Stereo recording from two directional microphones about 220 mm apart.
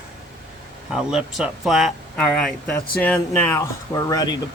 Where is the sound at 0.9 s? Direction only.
Centre (ahead or behind).